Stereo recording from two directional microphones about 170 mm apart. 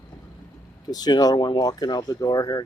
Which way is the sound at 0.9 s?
25° left (ahead or behind).